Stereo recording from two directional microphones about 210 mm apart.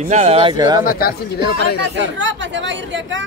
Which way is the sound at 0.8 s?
45° left (ahead or behind).